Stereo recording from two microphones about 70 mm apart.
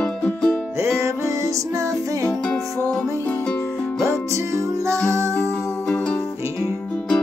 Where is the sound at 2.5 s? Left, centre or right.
Left.